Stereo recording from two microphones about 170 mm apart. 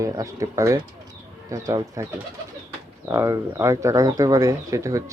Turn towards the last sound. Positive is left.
turn(degrees=-20)  # may be behind; listen again after turning